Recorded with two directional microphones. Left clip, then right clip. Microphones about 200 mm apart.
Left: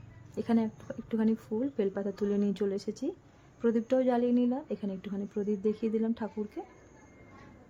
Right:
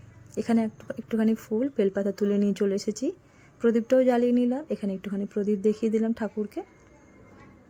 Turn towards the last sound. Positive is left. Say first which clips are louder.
# right 6 dB
turn(degrees=-15)  # may be behind; listen again after turning